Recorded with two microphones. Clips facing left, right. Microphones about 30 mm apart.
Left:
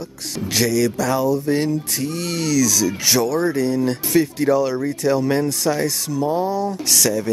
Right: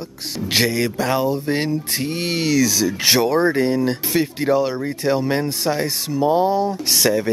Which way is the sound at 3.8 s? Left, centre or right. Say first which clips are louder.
Left 2 dB; right.